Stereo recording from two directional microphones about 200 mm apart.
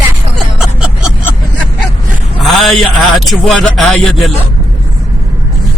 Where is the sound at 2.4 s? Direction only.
Centre (ahead or behind).